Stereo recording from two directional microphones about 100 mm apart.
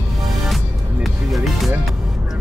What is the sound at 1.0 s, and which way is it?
Speech, centre (ahead or behind).